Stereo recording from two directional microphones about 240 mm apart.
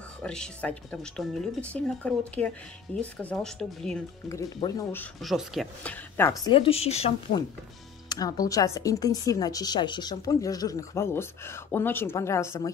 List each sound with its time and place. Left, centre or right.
0.2 s speech: centre
5.2 s speech: centre
6.5 s speech: left
8.1 s speech: centre